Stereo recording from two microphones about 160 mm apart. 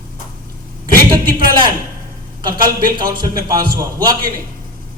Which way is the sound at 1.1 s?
30° right (ahead or behind).